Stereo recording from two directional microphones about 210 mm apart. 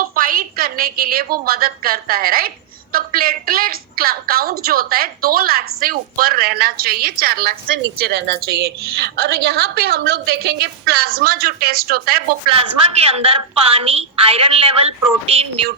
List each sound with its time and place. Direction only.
0.0 s a woman's voice: 40° right (ahead or behind)
12.5 s speech: 30° right (ahead or behind)